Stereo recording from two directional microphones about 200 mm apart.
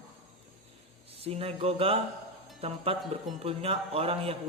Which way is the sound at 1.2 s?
30° right (ahead or behind).